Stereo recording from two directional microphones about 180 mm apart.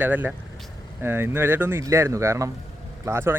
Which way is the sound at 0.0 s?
10° right (ahead or behind).